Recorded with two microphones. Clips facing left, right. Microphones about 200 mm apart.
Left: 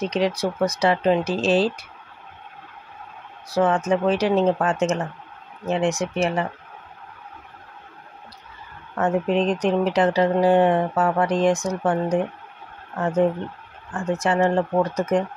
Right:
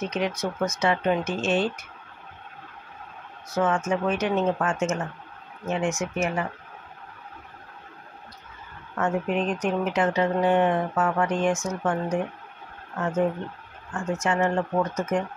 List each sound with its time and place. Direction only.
0.0 s speech: 35° left (ahead or behind)
3.4 s speech: 35° left (ahead or behind)
8.9 s speech: 35° left (ahead or behind)